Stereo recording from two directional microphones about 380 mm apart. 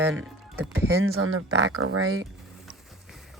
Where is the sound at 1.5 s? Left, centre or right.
Right.